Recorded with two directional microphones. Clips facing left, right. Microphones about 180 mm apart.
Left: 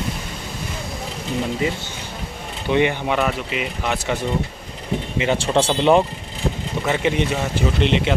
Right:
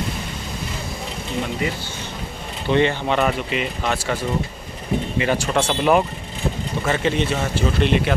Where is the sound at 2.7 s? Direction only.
15° left (ahead or behind).